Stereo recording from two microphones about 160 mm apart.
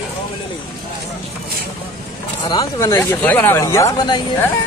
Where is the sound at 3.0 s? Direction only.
10° left (ahead or behind).